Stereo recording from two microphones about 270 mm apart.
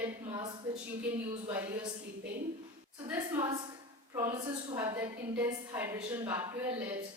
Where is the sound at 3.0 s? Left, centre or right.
Centre.